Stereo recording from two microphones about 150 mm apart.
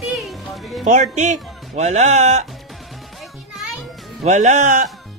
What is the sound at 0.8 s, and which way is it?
Speech, 50° right (ahead or behind).